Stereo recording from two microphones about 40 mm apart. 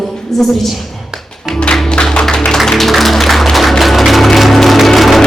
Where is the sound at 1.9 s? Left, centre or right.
Left.